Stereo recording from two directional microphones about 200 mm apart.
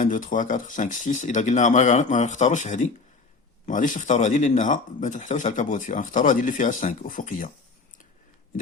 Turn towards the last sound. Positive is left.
turn(degrees=40)  # may be behind; listen again after turning